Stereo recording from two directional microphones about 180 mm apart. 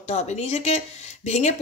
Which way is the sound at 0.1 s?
40° left (ahead or behind).